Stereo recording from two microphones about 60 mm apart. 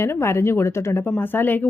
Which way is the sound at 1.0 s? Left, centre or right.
Left.